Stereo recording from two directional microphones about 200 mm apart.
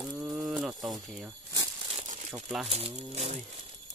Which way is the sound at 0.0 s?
5° right (ahead or behind).